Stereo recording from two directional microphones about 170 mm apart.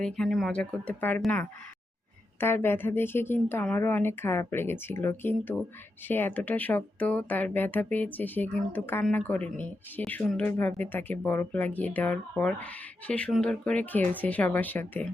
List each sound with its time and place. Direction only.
0.0 s speech: centre (ahead or behind)